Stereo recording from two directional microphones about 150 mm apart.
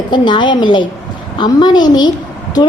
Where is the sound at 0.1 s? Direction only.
30° left (ahead or behind).